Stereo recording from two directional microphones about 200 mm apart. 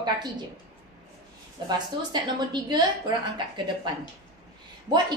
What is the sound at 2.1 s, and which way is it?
Speech, 20° right (ahead or behind).